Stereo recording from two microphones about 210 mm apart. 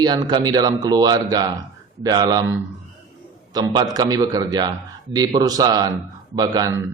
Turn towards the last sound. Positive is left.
turn(degrees=-20)  # may be behind; listen again after turning